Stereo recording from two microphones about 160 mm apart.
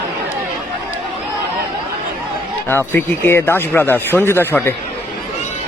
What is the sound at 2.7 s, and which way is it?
Speech, 15° left (ahead or behind).